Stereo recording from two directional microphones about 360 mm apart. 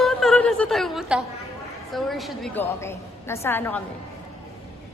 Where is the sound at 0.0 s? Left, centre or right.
Centre.